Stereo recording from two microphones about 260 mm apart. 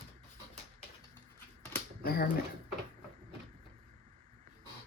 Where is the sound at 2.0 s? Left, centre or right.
Left.